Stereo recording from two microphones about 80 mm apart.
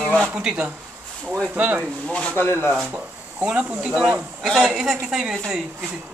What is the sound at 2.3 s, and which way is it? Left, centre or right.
Speech, left.